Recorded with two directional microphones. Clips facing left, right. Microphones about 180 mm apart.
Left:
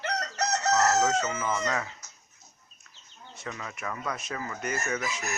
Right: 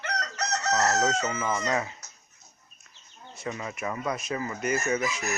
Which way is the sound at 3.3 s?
15° right (ahead or behind).